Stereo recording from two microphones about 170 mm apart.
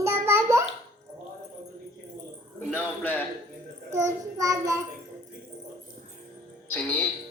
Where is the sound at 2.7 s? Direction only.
10° left (ahead or behind).